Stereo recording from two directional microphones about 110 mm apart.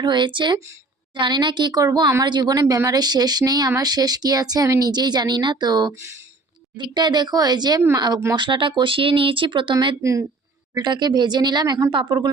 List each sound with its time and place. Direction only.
0.0 s a woman's voice: 45° right (ahead or behind)
10.0 s speech: 30° right (ahead or behind)
10.8 s a woman's voice: 40° right (ahead or behind)